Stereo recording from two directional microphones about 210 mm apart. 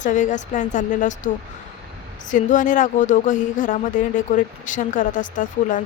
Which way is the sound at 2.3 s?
40° left (ahead or behind).